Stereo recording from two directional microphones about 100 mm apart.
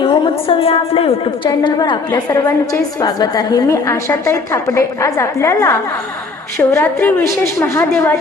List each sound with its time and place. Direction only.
0.0 s a woman's voice: 60° left (ahead or behind)
1.5 s a woman's voice: 45° left (ahead or behind)
3.7 s a woman's voice: 25° left (ahead or behind)